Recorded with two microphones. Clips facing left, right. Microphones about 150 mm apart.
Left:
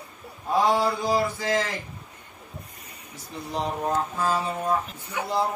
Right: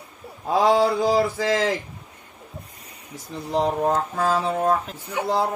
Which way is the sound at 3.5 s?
90° right.